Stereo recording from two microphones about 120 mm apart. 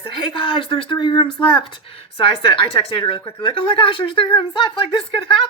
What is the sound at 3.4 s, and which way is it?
Speech, 45° left (ahead or behind).